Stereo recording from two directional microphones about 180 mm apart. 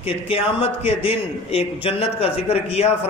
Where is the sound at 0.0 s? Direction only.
30° left (ahead or behind).